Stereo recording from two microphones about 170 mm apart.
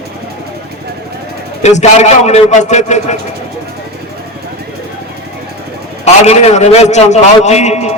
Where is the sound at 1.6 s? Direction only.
40° left (ahead or behind).